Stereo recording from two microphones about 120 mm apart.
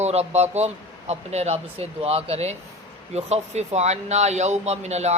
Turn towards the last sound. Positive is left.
turn(degrees=-65)  # may be behind; listen again after turning